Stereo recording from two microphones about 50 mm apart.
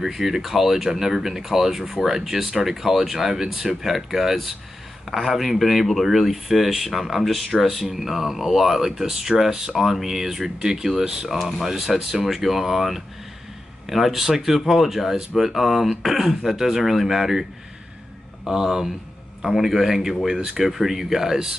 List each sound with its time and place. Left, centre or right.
0.0 s speech: centre
20.3 s speech: centre
20.6 s speech: centre